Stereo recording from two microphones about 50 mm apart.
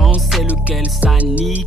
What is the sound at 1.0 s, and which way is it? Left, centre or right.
Music, right.